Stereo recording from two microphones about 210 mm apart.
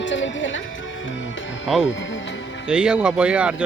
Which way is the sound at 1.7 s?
Centre (ahead or behind).